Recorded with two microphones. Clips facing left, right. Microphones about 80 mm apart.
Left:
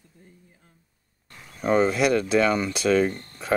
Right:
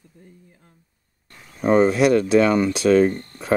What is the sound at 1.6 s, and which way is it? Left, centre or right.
Speech, right.